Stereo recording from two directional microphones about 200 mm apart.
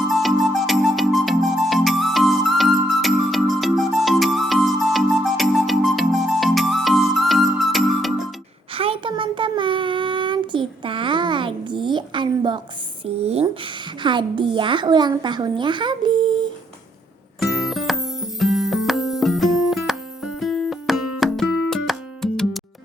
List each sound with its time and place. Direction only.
0.1 s music: centre (ahead or behind)
8.7 s child singing: 25° right (ahead or behind)
13.1 s a sound: 30° right (ahead or behind)
17.4 s music: centre (ahead or behind)